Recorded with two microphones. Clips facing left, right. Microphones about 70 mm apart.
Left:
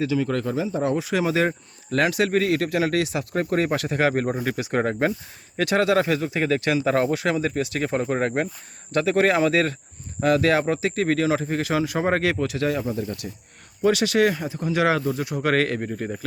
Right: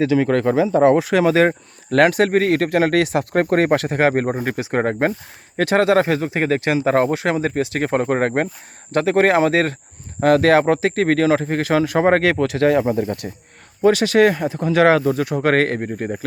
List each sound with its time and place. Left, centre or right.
0.0 s speech: right
9.0 s speech: right
10.2 s speech: right
13.8 s speech: right